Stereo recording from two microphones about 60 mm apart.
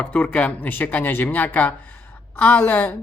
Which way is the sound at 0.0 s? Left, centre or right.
Centre.